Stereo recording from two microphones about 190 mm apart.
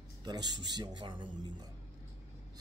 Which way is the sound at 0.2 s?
20° right (ahead or behind).